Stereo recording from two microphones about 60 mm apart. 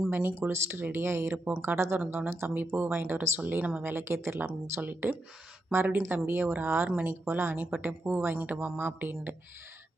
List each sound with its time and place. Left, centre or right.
0.1 s speech: right
2.5 s speech: right
3.9 s speech: right
4.8 s speech: right